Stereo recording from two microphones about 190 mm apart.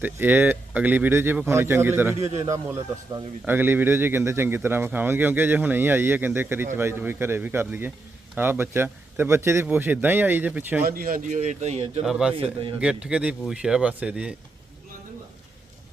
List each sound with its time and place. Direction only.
0.0 s a man's voice: 10° right (ahead or behind)
2.1 s a man's voice: 35° right (ahead or behind)
2.4 s a man's voice: 15° right (ahead or behind)
10.8 s a man's voice: 50° right (ahead or behind); by 12.0 s 35° right (ahead or behind)
12.0 s speech: 5° right (ahead or behind)